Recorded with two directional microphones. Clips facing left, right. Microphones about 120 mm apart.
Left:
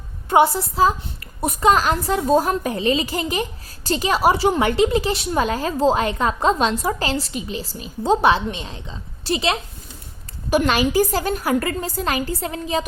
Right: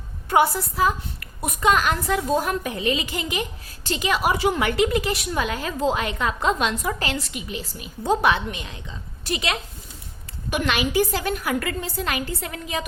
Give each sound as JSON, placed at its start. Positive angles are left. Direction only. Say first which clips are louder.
{"t": 0.3, "sound": "a woman's voice", "louder": "left 3 dB", "side_deg": 25}